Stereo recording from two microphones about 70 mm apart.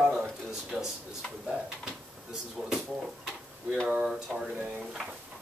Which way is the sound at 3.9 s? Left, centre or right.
Centre.